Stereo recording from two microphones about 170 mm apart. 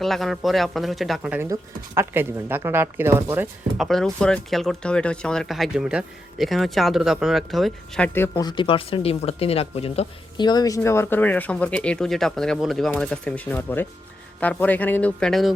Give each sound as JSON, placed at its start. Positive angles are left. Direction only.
{"t": 0.0, "sound": "speech", "side_deg": 0}
{"t": 3.8, "sound": "speech", "side_deg": 0}
{"t": 8.4, "sound": "speech", "side_deg": 25}
{"t": 10.4, "sound": "speech", "side_deg": 25}